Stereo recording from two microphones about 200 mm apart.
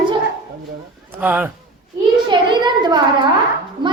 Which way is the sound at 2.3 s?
20° right (ahead or behind).